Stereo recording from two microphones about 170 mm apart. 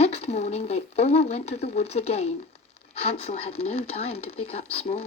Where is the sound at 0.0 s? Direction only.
40° left (ahead or behind).